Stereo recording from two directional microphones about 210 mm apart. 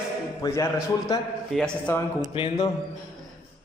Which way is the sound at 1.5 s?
Centre (ahead or behind).